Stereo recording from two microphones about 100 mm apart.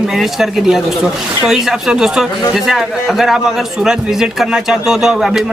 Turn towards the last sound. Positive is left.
turn(degrees=-5)  # may be behind; listen again after turning